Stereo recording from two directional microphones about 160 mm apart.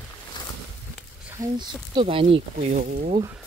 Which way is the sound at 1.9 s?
35° right (ahead or behind).